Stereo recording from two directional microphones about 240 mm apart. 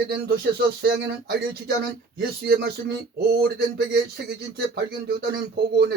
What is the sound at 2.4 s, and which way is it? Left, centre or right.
Speech, right.